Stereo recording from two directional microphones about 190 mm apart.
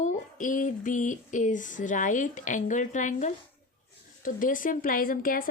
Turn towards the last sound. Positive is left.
turn(degrees=50)  # may be behind; listen again after turning